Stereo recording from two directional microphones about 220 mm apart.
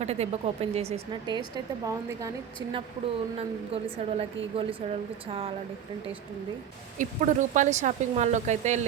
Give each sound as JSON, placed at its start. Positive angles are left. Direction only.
{"t": 0.0, "sound": "a woman's voice", "side_deg": -30}
{"t": 3.3, "sound": "a woman's voice", "side_deg": -25}
{"t": 7.0, "sound": "speech", "side_deg": -35}